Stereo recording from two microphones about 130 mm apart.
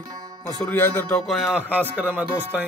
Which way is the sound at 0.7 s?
15° left (ahead or behind).